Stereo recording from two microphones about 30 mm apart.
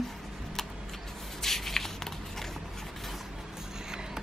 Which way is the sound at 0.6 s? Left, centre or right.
Centre.